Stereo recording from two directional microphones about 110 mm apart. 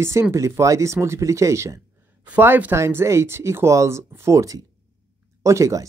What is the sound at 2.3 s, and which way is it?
Speech, 15° right (ahead or behind).